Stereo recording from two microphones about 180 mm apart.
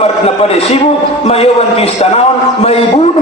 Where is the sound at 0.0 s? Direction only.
35° left (ahead or behind).